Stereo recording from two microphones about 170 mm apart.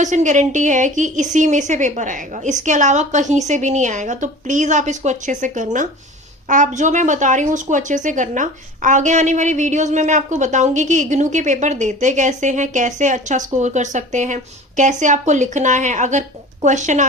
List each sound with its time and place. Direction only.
0.0 s a woman's voice: 45° right (ahead or behind)